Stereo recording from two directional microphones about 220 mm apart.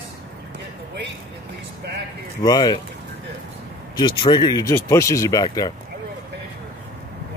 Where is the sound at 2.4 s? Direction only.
20° left (ahead or behind).